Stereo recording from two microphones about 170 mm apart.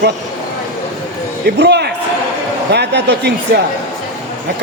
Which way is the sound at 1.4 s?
85° right.